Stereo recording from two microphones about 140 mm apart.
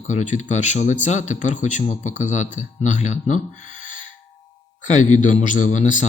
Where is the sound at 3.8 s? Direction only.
65° left (ahead or behind).